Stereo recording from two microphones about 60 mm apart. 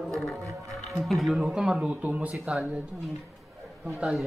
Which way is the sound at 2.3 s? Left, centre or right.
Centre.